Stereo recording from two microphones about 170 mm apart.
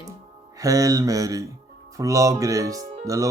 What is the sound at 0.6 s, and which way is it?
Speech, 20° right (ahead or behind).